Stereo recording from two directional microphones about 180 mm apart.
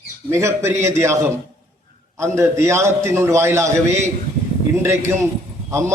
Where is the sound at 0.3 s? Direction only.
15° right (ahead or behind).